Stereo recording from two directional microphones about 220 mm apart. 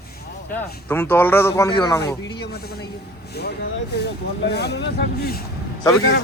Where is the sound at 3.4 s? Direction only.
50° left (ahead or behind).